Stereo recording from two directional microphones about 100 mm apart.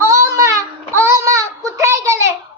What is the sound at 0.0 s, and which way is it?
Baby cry, 30° right (ahead or behind).